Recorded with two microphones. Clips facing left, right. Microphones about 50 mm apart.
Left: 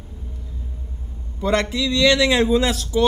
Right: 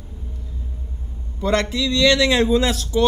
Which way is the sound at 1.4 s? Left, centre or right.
Centre.